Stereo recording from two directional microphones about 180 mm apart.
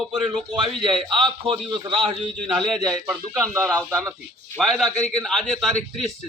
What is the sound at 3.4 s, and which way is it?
Speech, 15° right (ahead or behind).